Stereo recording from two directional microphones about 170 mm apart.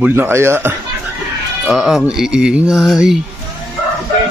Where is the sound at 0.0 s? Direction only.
10° right (ahead or behind).